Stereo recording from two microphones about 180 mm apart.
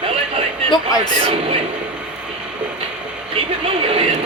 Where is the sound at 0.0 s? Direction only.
30° right (ahead or behind).